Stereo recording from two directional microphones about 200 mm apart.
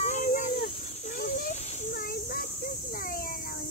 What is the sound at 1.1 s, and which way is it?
Children playing, 40° left (ahead or behind).